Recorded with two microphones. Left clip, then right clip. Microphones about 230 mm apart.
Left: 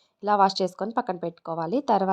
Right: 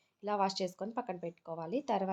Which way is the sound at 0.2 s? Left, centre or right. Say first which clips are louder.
Left 12 dB; left.